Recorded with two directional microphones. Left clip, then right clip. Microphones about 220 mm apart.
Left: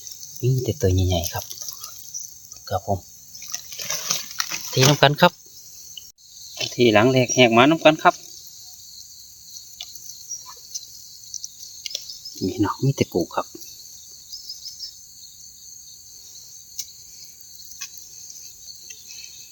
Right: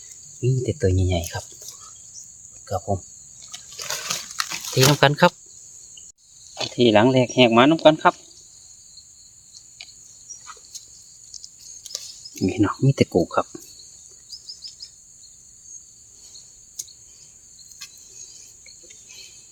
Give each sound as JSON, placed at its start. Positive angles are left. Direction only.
{"t": 0.4, "sound": "speech", "side_deg": 0}
{"t": 2.6, "sound": "speech", "side_deg": -5}
{"t": 4.0, "sound": "a sound", "side_deg": -10}
{"t": 6.6, "sound": "speech", "side_deg": -15}
{"t": 12.4, "sound": "speech", "side_deg": -15}